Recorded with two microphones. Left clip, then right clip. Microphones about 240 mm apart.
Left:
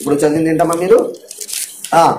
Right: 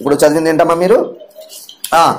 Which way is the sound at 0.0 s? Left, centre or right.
Right.